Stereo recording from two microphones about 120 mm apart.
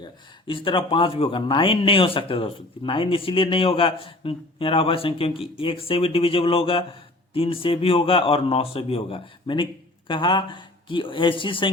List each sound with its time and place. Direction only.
0.0 s speech: 45° left (ahead or behind)